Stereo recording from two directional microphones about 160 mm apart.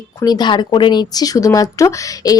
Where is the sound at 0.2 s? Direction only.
25° left (ahead or behind).